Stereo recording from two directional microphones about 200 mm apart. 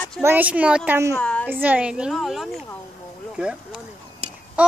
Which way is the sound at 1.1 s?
5° left (ahead or behind).